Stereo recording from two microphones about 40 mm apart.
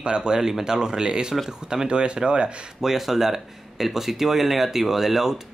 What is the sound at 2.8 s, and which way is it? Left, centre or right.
Speech, centre.